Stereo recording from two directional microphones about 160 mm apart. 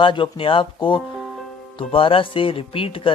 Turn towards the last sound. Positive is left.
turn(degrees=35)  # may be behind; listen again after turning